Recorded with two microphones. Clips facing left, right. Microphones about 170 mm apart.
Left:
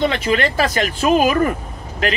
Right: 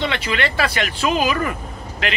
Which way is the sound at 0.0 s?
45° left (ahead or behind).